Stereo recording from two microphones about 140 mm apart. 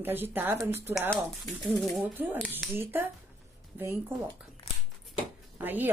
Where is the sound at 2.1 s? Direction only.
15° right (ahead or behind).